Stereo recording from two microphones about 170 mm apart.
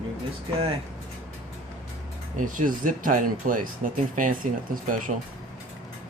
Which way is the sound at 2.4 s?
50° right (ahead or behind).